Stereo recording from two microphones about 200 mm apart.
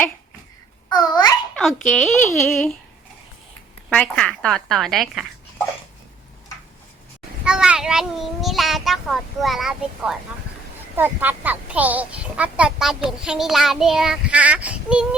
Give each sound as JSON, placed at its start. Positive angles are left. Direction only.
{"t": 0.9, "sound": "a child's voice", "side_deg": 20}
{"t": 1.5, "sound": "a child's voice", "side_deg": 5}
{"t": 3.8, "sound": "a child's voice", "side_deg": 5}
{"t": 7.4, "sound": "a child's voice", "side_deg": -5}